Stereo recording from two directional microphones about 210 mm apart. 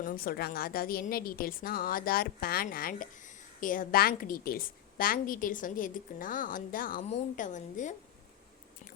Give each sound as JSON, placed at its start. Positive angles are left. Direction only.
{"t": 0.0, "sound": "a woman's voice", "side_deg": 45}